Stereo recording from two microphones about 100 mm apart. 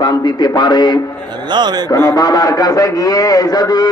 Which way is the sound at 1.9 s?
25° left (ahead or behind).